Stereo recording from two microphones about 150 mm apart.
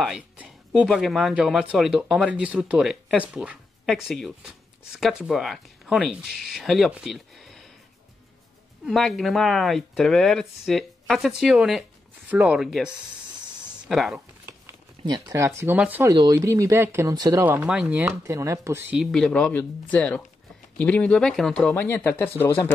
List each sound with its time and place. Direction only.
0.0 s music: 5° right (ahead or behind)
0.8 s speech: centre (ahead or behind)
8.8 s speech: centre (ahead or behind)
15.0 s speech: 25° right (ahead or behind)
16.1 s speech: 25° right (ahead or behind)
17.5 s speech: 5° right (ahead or behind)
18.9 s speech: 5° left (ahead or behind)
21.7 s speech: 15° left (ahead or behind)